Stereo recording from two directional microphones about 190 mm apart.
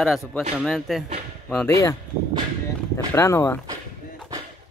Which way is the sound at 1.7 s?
15° left (ahead or behind).